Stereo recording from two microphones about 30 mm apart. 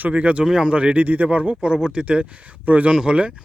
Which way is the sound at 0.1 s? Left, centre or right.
Right.